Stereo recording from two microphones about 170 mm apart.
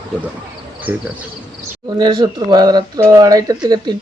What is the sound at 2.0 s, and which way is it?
Speech, 25° right (ahead or behind).